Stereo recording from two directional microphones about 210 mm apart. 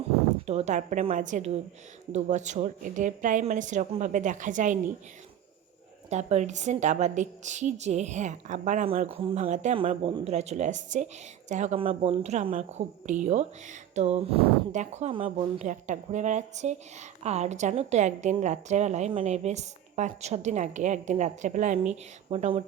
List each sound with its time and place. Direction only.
0.4 s a woman's voice: 30° right (ahead or behind)
6.1 s a woman's voice: 30° right (ahead or behind)